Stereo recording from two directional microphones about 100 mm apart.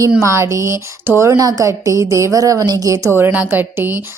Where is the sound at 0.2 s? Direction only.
30° right (ahead or behind).